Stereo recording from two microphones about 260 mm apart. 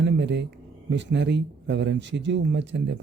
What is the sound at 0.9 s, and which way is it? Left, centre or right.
Speech, right.